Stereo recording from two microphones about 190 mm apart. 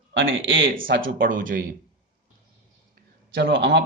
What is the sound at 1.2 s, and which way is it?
Speech, 45° right (ahead or behind).